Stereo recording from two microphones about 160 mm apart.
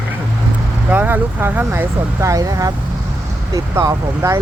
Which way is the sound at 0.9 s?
10° right (ahead or behind).